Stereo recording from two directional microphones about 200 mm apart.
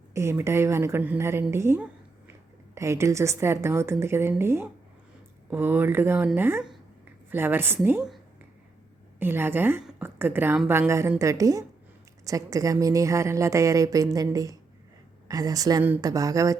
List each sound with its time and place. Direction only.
0.1 s a woman's voice: 15° right (ahead or behind)